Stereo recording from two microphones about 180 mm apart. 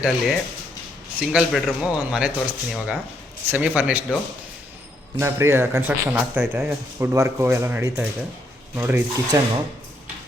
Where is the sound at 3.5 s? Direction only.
10° right (ahead or behind).